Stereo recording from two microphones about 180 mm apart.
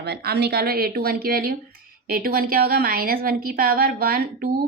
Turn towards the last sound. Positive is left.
turn(degrees=-55)  # may be behind; listen again after turning